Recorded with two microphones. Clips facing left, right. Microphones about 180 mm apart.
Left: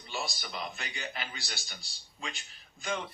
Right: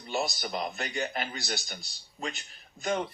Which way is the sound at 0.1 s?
40° right (ahead or behind).